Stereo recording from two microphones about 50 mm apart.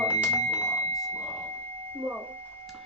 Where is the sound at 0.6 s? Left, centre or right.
Left.